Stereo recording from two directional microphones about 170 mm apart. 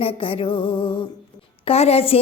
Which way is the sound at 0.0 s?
30° left (ahead or behind).